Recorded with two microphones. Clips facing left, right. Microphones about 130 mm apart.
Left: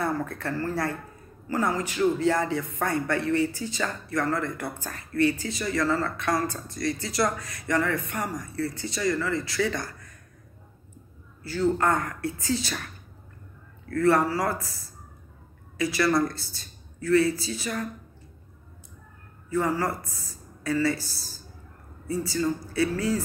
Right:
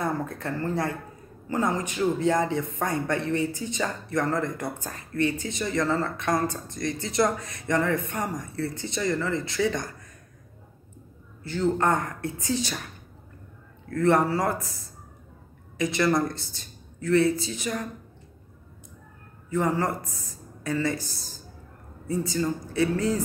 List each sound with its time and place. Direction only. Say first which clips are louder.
0.2 s speech: even; 20° right (ahead or behind)
11.4 s speech: even; 25° right (ahead or behind)
13.8 s speech: even; 20° right (ahead or behind)
15.8 s speech: even; 20° right (ahead or behind)
19.5 s speech: right 1 dB; 20° right (ahead or behind)